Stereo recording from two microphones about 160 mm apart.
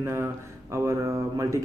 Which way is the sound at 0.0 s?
15° right (ahead or behind).